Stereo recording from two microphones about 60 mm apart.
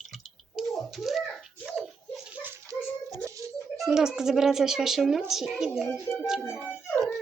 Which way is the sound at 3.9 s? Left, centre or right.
Centre.